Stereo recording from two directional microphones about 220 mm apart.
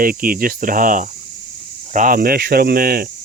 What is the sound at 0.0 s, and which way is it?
Speech, 40° right (ahead or behind).